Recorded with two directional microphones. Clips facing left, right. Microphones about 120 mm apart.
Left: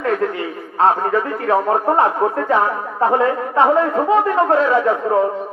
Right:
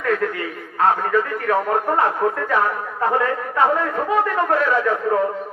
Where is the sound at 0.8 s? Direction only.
25° left (ahead or behind).